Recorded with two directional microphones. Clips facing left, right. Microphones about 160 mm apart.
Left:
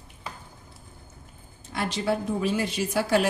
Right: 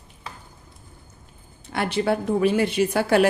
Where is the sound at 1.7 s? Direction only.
60° right (ahead or behind).